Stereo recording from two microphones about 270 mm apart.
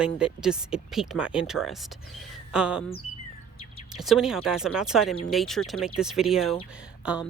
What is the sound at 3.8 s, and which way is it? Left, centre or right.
A woman's voice, centre.